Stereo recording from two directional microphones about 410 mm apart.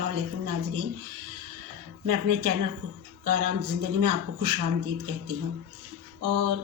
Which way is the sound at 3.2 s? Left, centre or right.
Right.